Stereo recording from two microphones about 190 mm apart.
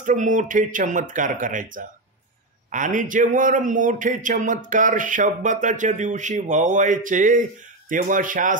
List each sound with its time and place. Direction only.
0.0 s speech: 40° right (ahead or behind)